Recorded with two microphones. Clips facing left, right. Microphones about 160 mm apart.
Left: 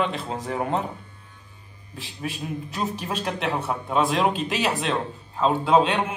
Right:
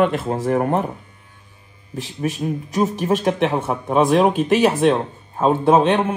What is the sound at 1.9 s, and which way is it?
Speech, 45° right (ahead or behind).